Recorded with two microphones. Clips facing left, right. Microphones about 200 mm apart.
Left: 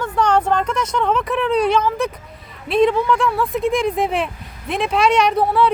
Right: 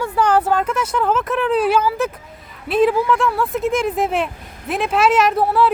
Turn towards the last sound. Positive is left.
turn(degrees=0)  # may be behind; listen again after turning